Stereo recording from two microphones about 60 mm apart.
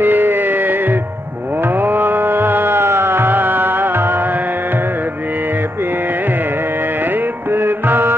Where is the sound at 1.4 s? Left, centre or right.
Right.